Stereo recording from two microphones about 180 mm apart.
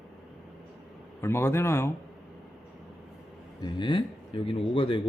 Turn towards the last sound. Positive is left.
turn(degrees=30)  # may be behind; listen again after turning